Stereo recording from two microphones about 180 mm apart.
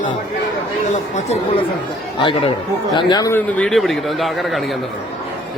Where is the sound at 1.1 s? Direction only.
35° left (ahead or behind); by 3.4 s 20° left (ahead or behind).